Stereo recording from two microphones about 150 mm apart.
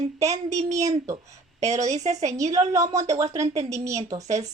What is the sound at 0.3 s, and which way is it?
Speech, 50° right (ahead or behind).